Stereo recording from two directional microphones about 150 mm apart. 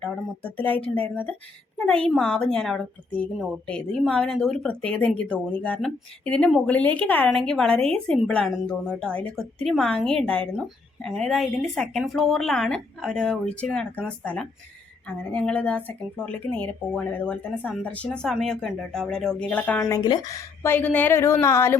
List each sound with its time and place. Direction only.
0.0 s a woman's voice: 10° left (ahead or behind)
15.0 s a woman's voice: 10° left (ahead or behind)
19.9 s a woman's voice: 25° left (ahead or behind)